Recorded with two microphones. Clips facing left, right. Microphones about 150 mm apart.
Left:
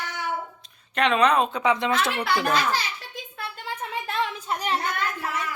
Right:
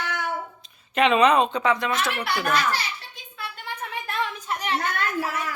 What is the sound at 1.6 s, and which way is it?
Speech, 20° left (ahead or behind).